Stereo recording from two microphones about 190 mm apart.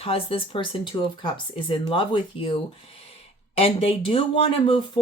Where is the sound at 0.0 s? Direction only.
30° left (ahead or behind).